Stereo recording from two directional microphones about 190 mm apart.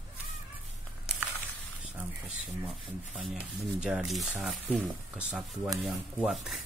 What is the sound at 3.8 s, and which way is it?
Speech, centre (ahead or behind).